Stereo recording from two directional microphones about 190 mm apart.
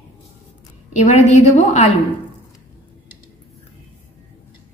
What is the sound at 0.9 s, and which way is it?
Speech, 40° left (ahead or behind).